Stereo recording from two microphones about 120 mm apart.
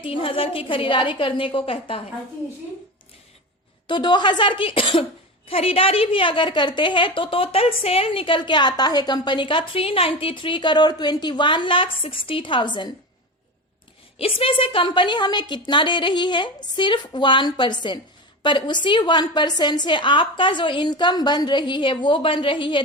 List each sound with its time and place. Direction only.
0.0 s a woman's voice: 45° left (ahead or behind)
3.8 s a woman's voice: 40° left (ahead or behind)
14.2 s a woman's voice: 50° left (ahead or behind)